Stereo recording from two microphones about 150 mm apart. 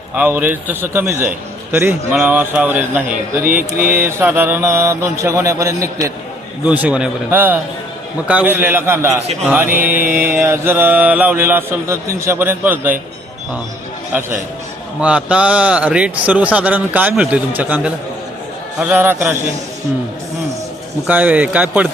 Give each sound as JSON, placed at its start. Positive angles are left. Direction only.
{"t": 0.1, "sound": "mantra", "side_deg": -10}
{"t": 6.7, "sound": "mantra", "side_deg": -10}
{"t": 9.2, "sound": "speech", "side_deg": -45}
{"t": 9.5, "sound": "mantra", "side_deg": -10}
{"t": 14.1, "sound": "mantra", "side_deg": -15}
{"t": 21.1, "sound": "mantra", "side_deg": -10}